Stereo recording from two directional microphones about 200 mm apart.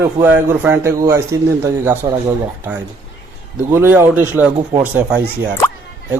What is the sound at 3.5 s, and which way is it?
A man's voice, 10° right (ahead or behind).